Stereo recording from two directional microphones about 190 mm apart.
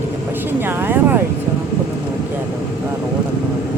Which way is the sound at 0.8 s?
10° right (ahead or behind).